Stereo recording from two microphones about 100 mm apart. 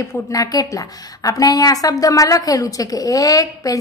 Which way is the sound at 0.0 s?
30° left (ahead or behind).